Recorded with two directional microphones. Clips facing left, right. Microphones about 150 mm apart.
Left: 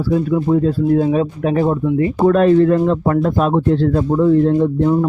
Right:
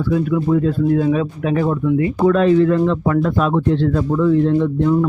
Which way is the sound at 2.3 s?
45° left (ahead or behind).